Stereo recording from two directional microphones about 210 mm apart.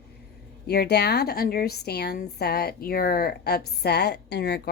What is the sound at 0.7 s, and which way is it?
A woman's voice, 50° left (ahead or behind).